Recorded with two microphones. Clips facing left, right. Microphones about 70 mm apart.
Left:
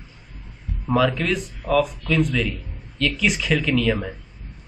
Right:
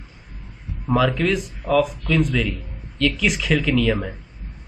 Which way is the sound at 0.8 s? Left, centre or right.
Centre.